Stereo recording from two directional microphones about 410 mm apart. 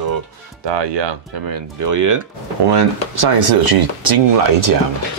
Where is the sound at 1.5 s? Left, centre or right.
Right.